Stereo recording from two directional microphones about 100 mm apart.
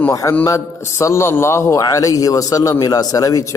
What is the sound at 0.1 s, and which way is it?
A man's voice, 35° left (ahead or behind).